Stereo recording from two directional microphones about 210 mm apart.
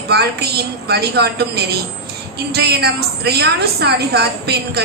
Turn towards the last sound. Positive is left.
turn(degrees=-50)  # may be behind; listen again after turning